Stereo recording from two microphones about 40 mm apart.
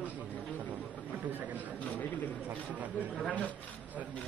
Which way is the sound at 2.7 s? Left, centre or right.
Right.